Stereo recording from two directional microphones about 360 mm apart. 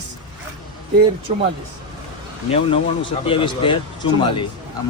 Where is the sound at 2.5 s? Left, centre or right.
Centre.